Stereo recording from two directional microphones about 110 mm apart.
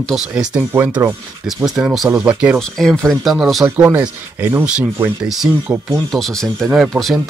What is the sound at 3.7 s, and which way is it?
Speech, 20° right (ahead or behind).